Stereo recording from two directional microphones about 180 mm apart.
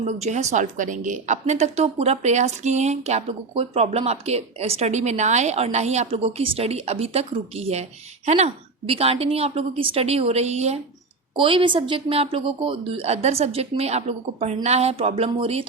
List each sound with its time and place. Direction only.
0.0 s a woman's voice: 40° right (ahead or behind)